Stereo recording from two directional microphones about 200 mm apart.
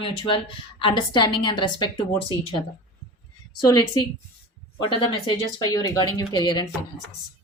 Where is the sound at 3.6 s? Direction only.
20° left (ahead or behind).